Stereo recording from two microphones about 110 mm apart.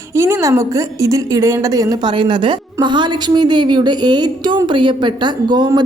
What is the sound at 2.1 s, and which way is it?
Speech, 45° right (ahead or behind).